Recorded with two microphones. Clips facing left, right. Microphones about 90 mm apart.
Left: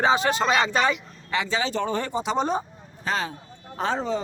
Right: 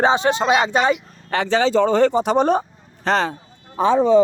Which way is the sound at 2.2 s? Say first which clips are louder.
Right 7 dB; 55° right (ahead or behind).